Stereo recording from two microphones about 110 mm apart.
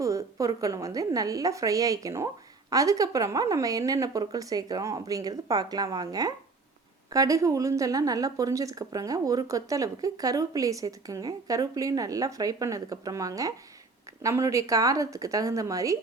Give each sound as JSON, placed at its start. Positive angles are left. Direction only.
{"t": 0.0, "sound": "a woman's voice", "side_deg": -30}